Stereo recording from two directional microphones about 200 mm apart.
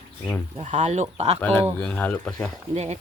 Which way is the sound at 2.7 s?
35° right (ahead or behind).